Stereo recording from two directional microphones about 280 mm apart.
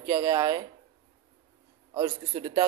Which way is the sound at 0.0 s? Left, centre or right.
Centre.